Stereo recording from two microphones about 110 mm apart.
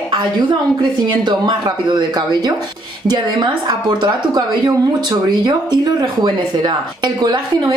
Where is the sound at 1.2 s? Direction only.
40° right (ahead or behind).